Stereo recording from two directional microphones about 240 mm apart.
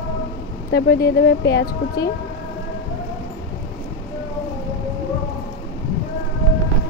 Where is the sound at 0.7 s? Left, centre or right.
Left.